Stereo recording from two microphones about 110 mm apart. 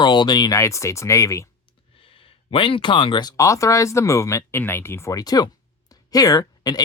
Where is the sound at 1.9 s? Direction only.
55° left (ahead or behind); by 5.5 s 35° left (ahead or behind).